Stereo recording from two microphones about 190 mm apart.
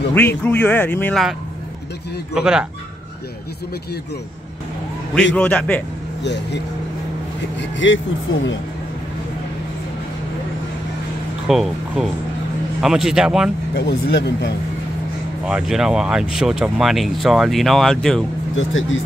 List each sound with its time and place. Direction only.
0.1 s speech: 10° left (ahead or behind)
2.3 s speech: 5° right (ahead or behind)
5.3 s speech: 5° left (ahead or behind)
6.2 s speech: 65° left (ahead or behind)
7.7 s speech: 75° left (ahead or behind)
11.4 s speech: centre (ahead or behind)
13.7 s speech: 60° left (ahead or behind)
15.4 s speech: 5° right (ahead or behind)
18.6 s speech: 90° left